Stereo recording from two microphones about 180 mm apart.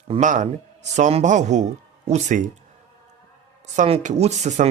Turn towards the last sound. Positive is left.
turn(degrees=-40)  # may be behind; listen again after turning